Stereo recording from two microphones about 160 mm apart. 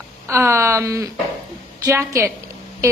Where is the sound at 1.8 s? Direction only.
15° right (ahead or behind).